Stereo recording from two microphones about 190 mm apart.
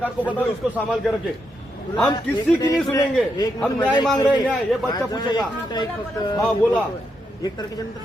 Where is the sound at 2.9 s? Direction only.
20° left (ahead or behind).